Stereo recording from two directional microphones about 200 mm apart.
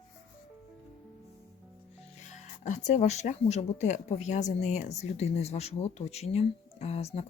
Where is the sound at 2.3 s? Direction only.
35° left (ahead or behind).